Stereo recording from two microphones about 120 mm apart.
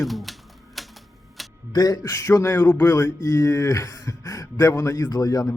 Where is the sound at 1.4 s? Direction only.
Centre (ahead or behind).